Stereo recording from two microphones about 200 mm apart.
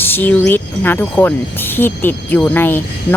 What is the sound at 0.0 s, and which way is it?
Speech, 10° left (ahead or behind).